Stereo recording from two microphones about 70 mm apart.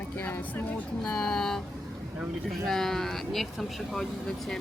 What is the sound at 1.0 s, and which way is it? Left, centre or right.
Speech, centre.